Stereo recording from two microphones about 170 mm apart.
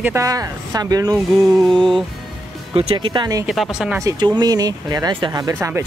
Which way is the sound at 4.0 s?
20° right (ahead or behind).